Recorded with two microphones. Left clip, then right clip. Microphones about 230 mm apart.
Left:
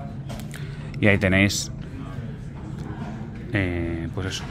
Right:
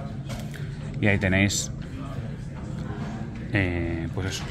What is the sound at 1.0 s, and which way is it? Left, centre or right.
Speech, centre.